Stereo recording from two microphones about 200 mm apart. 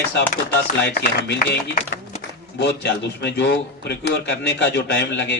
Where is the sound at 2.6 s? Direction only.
60° left (ahead or behind).